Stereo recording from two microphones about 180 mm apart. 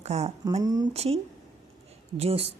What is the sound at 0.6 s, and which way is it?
Speech, 20° right (ahead or behind).